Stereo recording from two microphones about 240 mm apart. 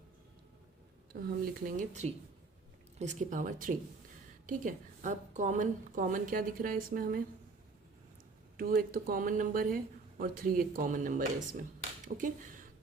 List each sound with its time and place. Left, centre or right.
1.1 s speech: right
8.5 s speech: right